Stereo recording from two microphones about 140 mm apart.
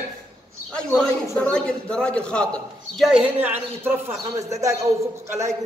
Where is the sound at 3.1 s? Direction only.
10° right (ahead or behind).